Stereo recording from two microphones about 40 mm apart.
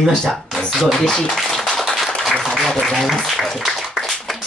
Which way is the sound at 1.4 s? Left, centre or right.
Centre.